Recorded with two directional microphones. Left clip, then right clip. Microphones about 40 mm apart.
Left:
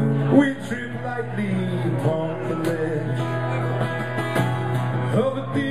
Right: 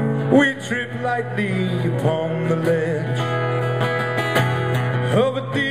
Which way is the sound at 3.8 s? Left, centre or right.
Right.